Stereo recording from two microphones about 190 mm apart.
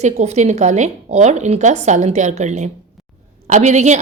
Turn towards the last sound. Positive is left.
turn(degrees=-40)  # may be behind; listen again after turning